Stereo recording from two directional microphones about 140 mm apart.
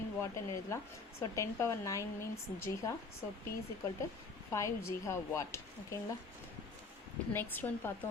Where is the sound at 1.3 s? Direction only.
20° left (ahead or behind).